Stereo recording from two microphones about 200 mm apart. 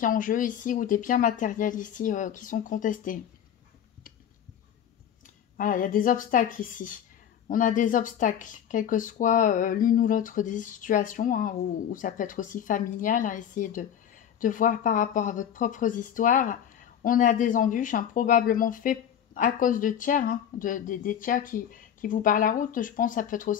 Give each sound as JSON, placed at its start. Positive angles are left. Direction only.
{"t": 0.0, "sound": "speech", "side_deg": 40}
{"t": 5.6, "sound": "speech", "side_deg": 40}